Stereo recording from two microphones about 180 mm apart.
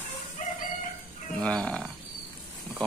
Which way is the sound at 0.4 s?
45° left (ahead or behind).